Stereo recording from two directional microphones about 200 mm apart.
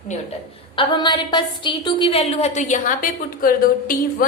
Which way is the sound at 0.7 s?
25° left (ahead or behind).